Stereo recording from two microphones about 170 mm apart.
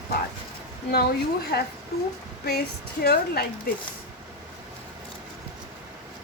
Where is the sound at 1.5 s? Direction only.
65° left (ahead or behind).